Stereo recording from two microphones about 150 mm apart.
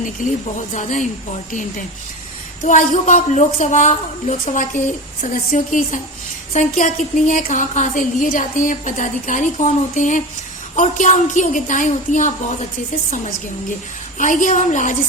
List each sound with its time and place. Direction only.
0.2 s a woman's voice: 55° left (ahead or behind)
2.6 s a woman's voice: 55° left (ahead or behind)
5.2 s a woman's voice: 65° left (ahead or behind)